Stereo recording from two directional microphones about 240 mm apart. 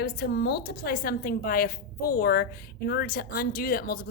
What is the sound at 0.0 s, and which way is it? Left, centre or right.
A woman's voice, left.